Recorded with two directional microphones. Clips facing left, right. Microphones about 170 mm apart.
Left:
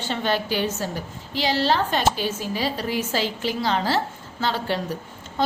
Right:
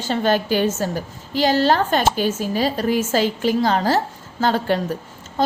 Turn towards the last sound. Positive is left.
turn(degrees=-40)  # may be behind; listen again after turning